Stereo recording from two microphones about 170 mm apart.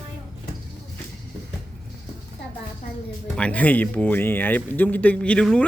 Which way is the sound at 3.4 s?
10° left (ahead or behind).